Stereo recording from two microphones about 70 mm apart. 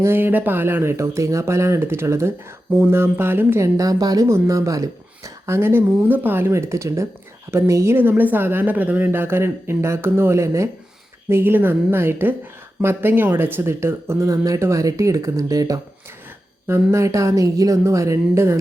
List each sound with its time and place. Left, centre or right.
0.0 s speech: right
3.6 s a woman's voice: right
4.3 s speech: right
8.1 s speech: right
16.6 s speech: right